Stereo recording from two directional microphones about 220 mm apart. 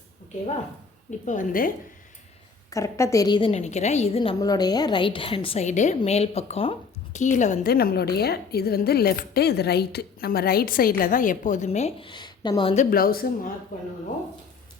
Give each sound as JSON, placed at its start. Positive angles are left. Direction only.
{"t": 1.2, "sound": "a woman's voice", "side_deg": 35}
{"t": 2.6, "sound": "a woman's voice", "side_deg": 15}